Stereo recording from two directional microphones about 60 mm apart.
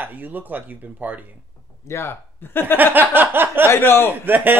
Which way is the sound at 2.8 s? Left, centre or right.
Right.